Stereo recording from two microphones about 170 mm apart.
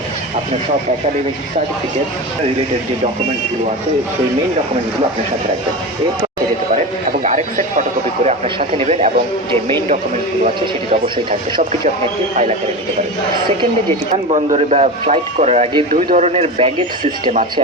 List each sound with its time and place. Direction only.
7.5 s a man's voice: 45° right (ahead or behind)
14.3 s a man's voice: 40° right (ahead or behind)
15.9 s a man's voice: 50° right (ahead or behind)